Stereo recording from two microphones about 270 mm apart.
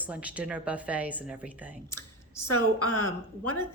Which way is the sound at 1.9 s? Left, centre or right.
Left.